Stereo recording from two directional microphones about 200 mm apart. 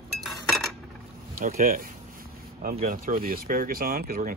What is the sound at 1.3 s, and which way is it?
Speech, 45° right (ahead or behind).